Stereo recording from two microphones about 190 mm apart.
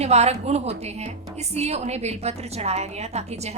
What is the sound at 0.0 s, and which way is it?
A woman's voice, 35° right (ahead or behind).